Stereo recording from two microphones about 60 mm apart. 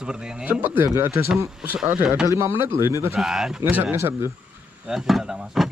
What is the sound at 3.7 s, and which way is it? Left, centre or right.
Speech, right.